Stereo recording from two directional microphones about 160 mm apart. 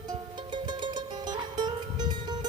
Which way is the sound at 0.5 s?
30° right (ahead or behind).